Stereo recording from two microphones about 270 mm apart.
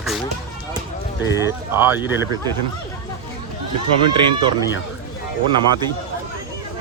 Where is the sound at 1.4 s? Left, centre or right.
Centre.